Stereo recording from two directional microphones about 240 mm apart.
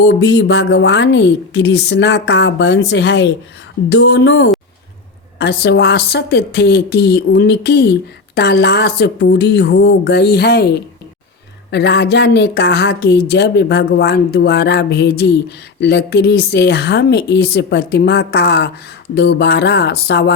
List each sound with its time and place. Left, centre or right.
0.0 s speech: left